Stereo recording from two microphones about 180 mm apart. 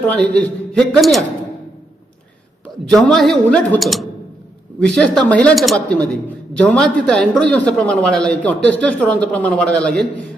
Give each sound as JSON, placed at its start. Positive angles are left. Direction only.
{"t": 0.1, "sound": "speech", "side_deg": 5}
{"t": 2.9, "sound": "speech", "side_deg": 0}